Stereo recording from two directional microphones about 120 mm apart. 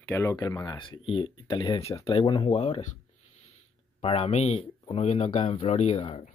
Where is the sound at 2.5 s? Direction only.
60° left (ahead or behind).